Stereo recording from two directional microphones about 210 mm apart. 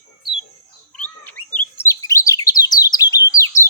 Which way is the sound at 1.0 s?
10° left (ahead or behind).